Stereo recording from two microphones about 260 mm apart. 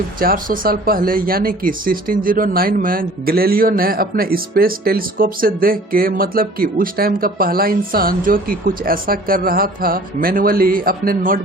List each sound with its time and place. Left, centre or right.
0.2 s speech: right